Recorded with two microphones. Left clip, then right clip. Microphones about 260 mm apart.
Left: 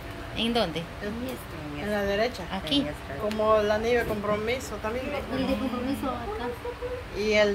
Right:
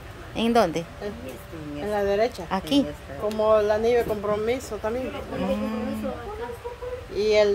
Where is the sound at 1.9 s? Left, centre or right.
Right.